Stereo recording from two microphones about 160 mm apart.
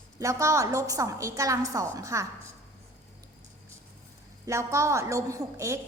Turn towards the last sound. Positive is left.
turn(degrees=-20)  # may be behind; listen again after turning